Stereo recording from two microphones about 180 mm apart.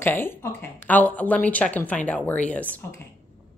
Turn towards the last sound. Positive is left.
turn(degrees=10)  # may be behind; listen again after turning